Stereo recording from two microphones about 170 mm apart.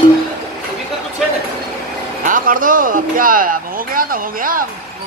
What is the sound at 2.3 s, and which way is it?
Speech, 55° right (ahead or behind).